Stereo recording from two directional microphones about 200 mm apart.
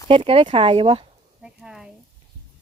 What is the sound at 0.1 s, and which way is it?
Speech, 25° right (ahead or behind).